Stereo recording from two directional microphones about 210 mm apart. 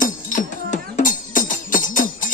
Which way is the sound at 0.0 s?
35° left (ahead or behind).